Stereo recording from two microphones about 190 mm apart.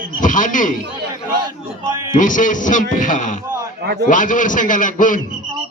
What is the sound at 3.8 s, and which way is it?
Speech, 60° right (ahead or behind).